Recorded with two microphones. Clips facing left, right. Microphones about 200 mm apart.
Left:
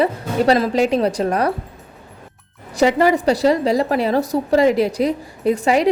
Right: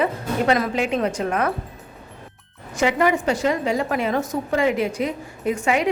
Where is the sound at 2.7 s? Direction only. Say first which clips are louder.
Left 4 dB; 35° left (ahead or behind).